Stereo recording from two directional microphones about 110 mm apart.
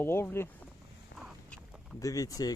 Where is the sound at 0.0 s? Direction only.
20° left (ahead or behind).